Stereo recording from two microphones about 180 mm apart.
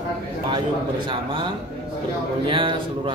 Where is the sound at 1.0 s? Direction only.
25° right (ahead or behind).